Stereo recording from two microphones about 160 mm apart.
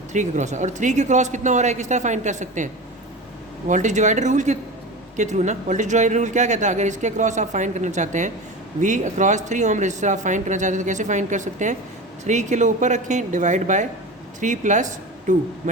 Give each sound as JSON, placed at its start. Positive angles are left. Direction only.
{"t": 0.1, "sound": "speech", "side_deg": -50}
{"t": 3.7, "sound": "speech", "side_deg": -50}